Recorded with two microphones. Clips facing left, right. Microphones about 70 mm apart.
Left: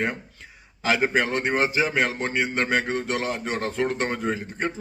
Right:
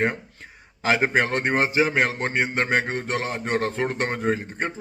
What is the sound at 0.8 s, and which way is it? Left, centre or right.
A man's voice, right.